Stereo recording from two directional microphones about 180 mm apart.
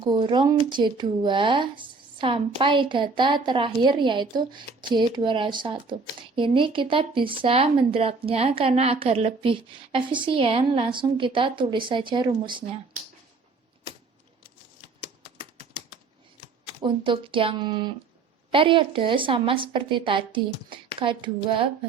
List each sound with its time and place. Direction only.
0.0 s speech: 25° right (ahead or behind)
16.6 s speech: 25° right (ahead or behind)